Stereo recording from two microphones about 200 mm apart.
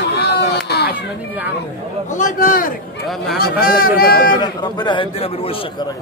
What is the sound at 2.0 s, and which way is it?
Speech, 40° left (ahead or behind).